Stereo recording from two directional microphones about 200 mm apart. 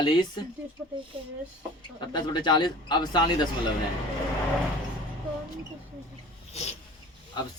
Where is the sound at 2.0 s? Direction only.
20° left (ahead or behind).